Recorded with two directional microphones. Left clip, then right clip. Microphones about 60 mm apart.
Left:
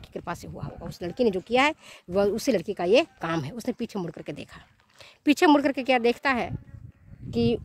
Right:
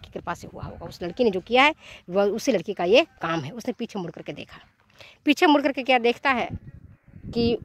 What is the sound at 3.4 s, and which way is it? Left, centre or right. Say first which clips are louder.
Speech: right 1 dB; centre.